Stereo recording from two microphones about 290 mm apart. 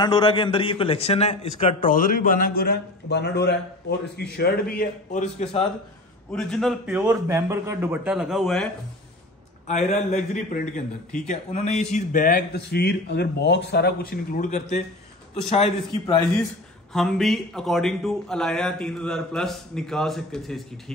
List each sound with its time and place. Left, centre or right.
0.0 s a man's voice: centre
6.3 s a man's voice: centre
9.7 s a man's voice: left
16.9 s a man's voice: centre